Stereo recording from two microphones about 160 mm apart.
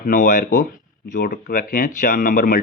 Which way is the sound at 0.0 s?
55° left (ahead or behind).